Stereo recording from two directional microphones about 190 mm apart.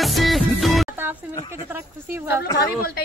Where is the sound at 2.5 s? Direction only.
55° left (ahead or behind).